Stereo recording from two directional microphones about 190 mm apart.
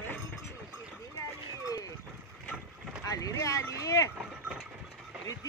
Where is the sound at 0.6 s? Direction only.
10° right (ahead or behind).